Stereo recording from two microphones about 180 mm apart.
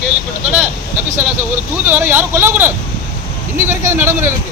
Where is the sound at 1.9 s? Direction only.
10° right (ahead or behind).